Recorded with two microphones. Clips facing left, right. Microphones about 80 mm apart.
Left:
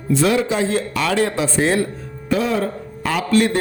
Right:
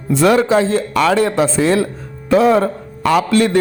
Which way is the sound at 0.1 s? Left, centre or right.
Right.